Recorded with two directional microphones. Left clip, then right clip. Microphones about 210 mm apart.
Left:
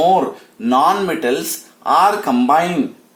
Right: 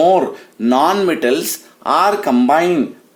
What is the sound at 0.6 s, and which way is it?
Speech, 50° right (ahead or behind).